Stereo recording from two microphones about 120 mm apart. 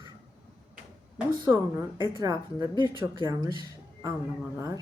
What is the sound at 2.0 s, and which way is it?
Speech, 35° right (ahead or behind).